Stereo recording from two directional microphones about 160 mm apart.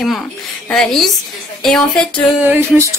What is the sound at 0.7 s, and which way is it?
A woman's voice, 5° left (ahead or behind).